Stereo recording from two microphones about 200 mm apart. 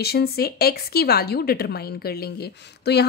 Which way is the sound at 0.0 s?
50° left (ahead or behind).